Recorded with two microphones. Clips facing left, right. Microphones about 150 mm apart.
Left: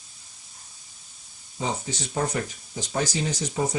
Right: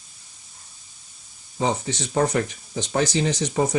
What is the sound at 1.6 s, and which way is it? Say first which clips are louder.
Speech: right 6 dB; 80° right.